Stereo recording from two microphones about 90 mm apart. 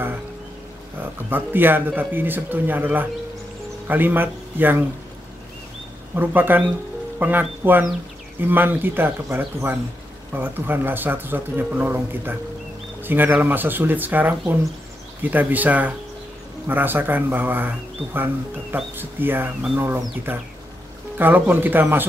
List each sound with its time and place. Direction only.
1.3 s speech: 20° right (ahead or behind)
6.1 s speech: 20° right (ahead or behind)